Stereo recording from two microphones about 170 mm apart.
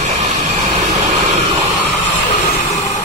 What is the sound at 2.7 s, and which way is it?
Vehicle, 20° left (ahead or behind).